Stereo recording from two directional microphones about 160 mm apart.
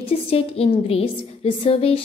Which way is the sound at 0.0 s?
35° left (ahead or behind).